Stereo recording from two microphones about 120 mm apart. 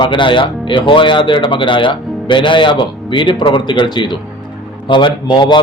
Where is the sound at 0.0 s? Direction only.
40° left (ahead or behind).